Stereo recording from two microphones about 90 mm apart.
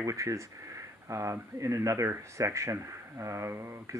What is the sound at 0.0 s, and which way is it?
Speech, 35° right (ahead or behind).